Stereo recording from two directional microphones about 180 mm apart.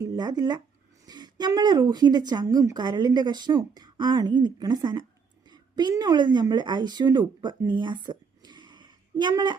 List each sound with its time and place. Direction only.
0.0 s a woman's voice: 20° right (ahead or behind)